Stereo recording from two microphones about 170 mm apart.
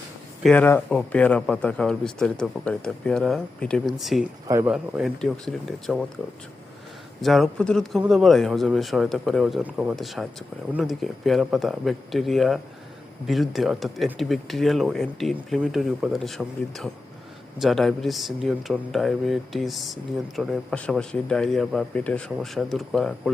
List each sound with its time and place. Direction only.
0.4 s speech: 10° left (ahead or behind)
4.4 s speech: 15° right (ahead or behind)
4.7 s speech: 5° right (ahead or behind)
7.2 s speech: centre (ahead or behind)